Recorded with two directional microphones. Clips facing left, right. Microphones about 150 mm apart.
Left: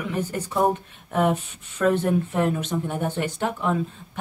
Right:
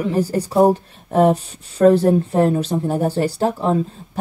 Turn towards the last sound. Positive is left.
turn(degrees=-35)  # may be behind; listen again after turning